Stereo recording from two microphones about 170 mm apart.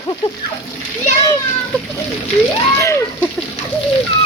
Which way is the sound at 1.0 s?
20° left (ahead or behind).